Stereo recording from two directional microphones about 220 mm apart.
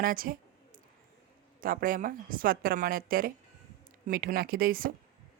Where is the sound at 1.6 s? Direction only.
40° right (ahead or behind).